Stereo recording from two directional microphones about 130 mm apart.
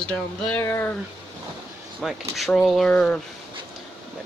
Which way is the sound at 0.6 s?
20° left (ahead or behind).